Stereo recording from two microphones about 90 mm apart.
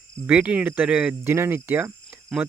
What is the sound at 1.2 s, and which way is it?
Speech, 25° right (ahead or behind).